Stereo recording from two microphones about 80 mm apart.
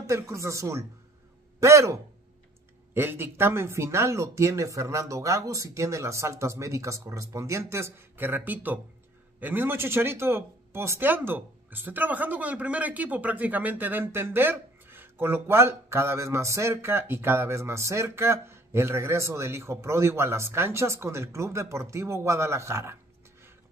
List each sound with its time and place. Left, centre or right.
0.0 s speech: right